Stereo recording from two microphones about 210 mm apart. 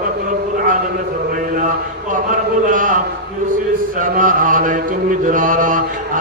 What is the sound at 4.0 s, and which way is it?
Mantra, 40° right (ahead or behind).